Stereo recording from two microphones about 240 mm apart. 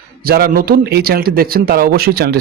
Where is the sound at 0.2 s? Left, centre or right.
Right.